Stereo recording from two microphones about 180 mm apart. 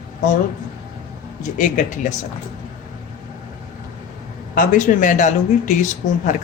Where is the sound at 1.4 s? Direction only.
45° left (ahead or behind).